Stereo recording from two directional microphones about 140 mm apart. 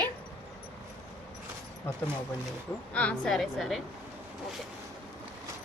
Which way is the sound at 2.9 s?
10° left (ahead or behind).